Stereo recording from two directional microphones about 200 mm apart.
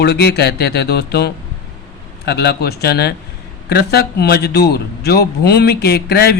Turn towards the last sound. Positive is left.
turn(degrees=55)  # may be behind; listen again after turning